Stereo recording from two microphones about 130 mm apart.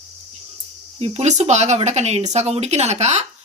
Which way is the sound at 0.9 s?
55° right (ahead or behind).